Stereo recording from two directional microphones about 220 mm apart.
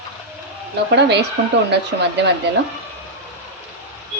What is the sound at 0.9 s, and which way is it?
Speech, 50° right (ahead or behind).